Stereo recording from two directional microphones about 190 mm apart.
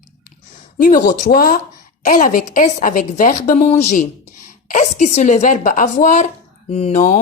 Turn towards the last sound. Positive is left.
turn(degrees=35)  # may be behind; listen again after turning